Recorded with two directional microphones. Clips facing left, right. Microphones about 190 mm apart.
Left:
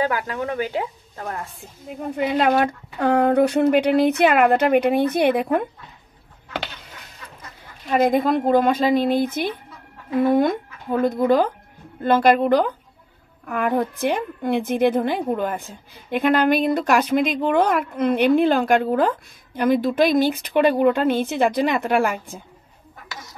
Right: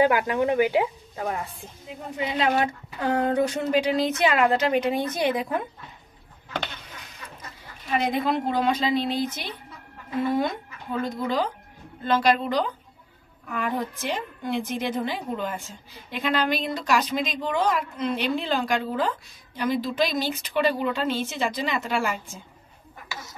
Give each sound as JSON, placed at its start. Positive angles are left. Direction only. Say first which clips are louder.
{"t": 0.0, "sound": "a woman's voice", "louder": "right 3 dB", "side_deg": -15}
{"t": 1.9, "sound": "a woman's voice", "louder": "left 7 dB", "side_deg": 55}
{"t": 7.9, "sound": "a woman's voice", "louder": "left 6 dB", "side_deg": 45}